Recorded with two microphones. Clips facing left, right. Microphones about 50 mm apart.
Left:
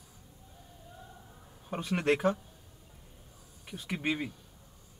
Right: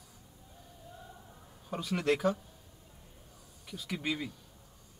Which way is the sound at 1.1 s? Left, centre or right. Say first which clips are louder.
Even; centre.